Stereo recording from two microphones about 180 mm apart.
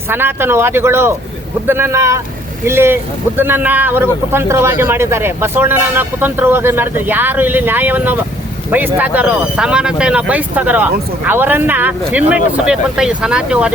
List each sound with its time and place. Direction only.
0.1 s speech: 10° right (ahead or behind)